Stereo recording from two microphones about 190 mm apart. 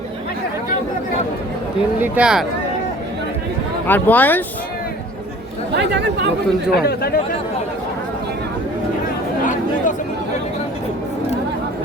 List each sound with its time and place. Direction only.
2.0 s speech: 5° right (ahead or behind)
3.8 s speech: 10° left (ahead or behind)
5.7 s speech: 65° right (ahead or behind)
6.7 s speech: 55° left (ahead or behind)
9.4 s chatter: 40° left (ahead or behind)